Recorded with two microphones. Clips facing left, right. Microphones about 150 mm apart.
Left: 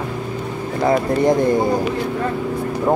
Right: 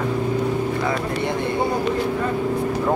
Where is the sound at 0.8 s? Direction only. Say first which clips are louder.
Left 6 dB; 40° left (ahead or behind).